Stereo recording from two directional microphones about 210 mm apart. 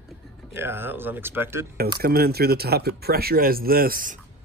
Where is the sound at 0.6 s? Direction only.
10° right (ahead or behind).